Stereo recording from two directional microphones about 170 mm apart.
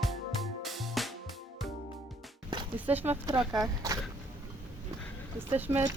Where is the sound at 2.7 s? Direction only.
10° right (ahead or behind).